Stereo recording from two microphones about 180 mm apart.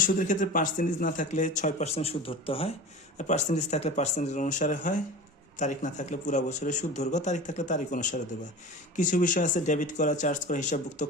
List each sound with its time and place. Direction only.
0.0 s speech: 45° left (ahead or behind); by 2.7 s 30° left (ahead or behind)
3.2 s speech: 40° left (ahead or behind)